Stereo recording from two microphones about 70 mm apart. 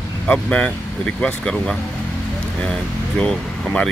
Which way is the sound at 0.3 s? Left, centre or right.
Centre.